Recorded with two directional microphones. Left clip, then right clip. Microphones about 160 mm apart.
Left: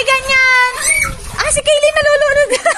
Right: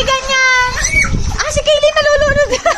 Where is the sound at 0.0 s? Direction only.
25° left (ahead or behind).